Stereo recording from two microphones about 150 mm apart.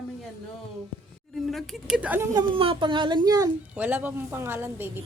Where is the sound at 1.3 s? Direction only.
Centre (ahead or behind); by 2.4 s 20° right (ahead or behind).